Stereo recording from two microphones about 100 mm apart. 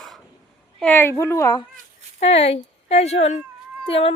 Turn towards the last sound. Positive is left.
turn(degrees=75)  # may be behind; listen again after turning